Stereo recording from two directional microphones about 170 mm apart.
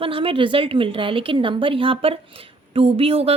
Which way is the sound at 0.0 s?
30° right (ahead or behind).